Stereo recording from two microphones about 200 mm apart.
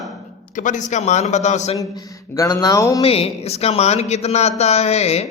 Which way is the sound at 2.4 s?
15° left (ahead or behind).